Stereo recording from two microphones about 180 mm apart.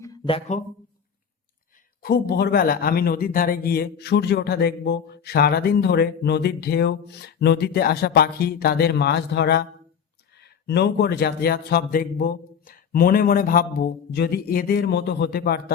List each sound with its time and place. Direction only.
0.3 s speech: 35° left (ahead or behind)
2.0 s a man's voice: 55° left (ahead or behind)